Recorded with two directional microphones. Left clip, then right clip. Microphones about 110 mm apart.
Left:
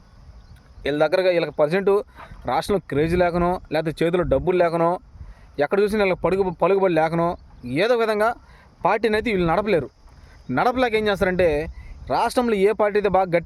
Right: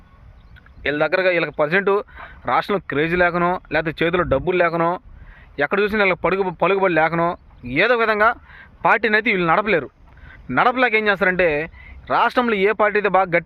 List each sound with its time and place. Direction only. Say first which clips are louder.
0.8 s a man's voice: right 1 dB; 30° left (ahead or behind)